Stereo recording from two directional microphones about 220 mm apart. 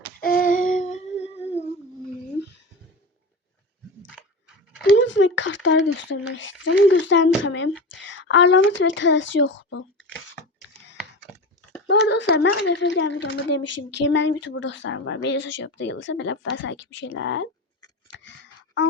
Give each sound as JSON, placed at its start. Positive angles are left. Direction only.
{"t": 0.2, "sound": "humming", "side_deg": 40}
{"t": 4.1, "sound": "a sound", "side_deg": -5}
{"t": 4.9, "sound": "speech", "side_deg": 55}
{"t": 10.9, "sound": "computer keyboard", "side_deg": 0}
{"t": 11.9, "sound": "speech", "side_deg": 55}
{"t": 14.0, "sound": "speech", "side_deg": 55}